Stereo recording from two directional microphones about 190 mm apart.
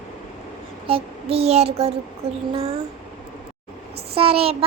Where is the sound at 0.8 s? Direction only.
30° right (ahead or behind).